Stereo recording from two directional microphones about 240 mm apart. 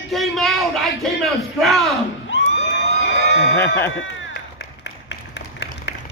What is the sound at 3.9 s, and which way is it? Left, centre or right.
Run, left.